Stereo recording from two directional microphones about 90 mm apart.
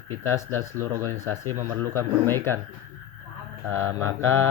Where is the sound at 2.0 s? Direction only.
25° left (ahead or behind).